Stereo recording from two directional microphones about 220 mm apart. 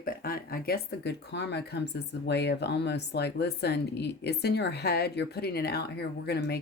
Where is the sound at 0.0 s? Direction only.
40° left (ahead or behind).